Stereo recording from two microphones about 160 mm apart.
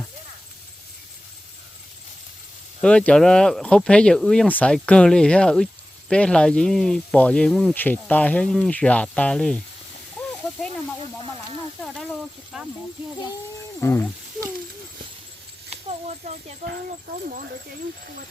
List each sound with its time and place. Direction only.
2.8 s speech: 5° left (ahead or behind)
10.2 s snake: 10° left (ahead or behind)
12.5 s speech: 5° right (ahead or behind)
13.8 s speech: 15° left (ahead or behind)
17.2 s speech: 60° right (ahead or behind)